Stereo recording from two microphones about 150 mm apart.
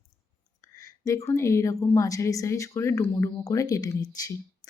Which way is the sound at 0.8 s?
20° left (ahead or behind).